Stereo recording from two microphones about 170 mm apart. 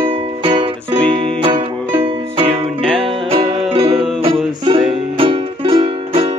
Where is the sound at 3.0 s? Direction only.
35° right (ahead or behind).